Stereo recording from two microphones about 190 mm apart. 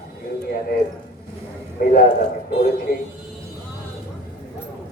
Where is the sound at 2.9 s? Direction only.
55° left (ahead or behind).